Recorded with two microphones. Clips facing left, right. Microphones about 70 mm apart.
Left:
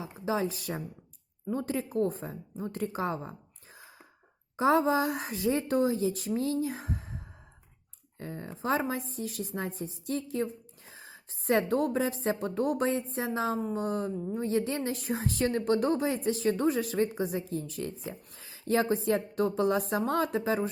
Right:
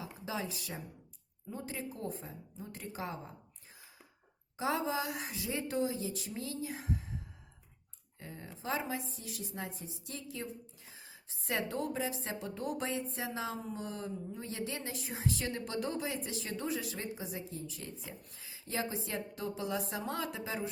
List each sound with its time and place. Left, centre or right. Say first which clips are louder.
0.0 s a woman's voice: left 9 dB; left
4.5 s a woman's voice: left 9 dB; left
8.2 s a woman's voice: left 8 dB; left